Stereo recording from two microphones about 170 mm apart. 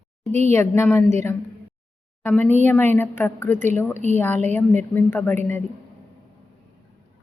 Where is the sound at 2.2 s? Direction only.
10° left (ahead or behind).